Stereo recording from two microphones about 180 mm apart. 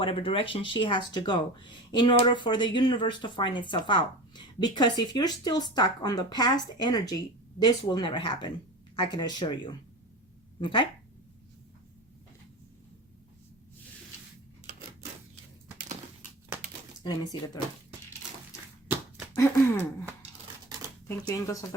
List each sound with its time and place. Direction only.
0.0 s speech: 30° left (ahead or behind)
17.0 s speech: 25° left (ahead or behind)
21.2 s speech: 20° left (ahead or behind)